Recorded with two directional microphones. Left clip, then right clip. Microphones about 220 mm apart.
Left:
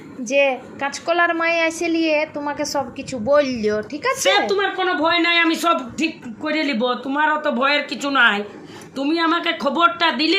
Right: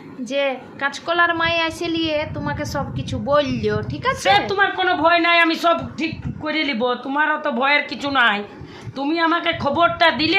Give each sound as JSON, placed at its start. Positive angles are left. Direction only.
{"t": 0.3, "sound": "a woman's voice", "side_deg": 5}